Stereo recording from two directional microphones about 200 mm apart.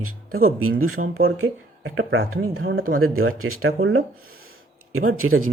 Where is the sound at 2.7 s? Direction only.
45° right (ahead or behind).